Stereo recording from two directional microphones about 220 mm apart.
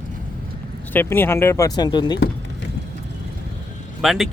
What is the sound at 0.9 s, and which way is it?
Speech, 10° left (ahead or behind).